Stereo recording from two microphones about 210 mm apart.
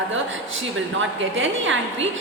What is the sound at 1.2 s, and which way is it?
Speech, 65° right (ahead or behind).